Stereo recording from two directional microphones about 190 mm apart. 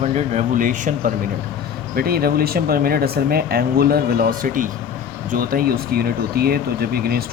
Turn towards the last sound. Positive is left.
turn(degrees=-55)  # may be behind; listen again after turning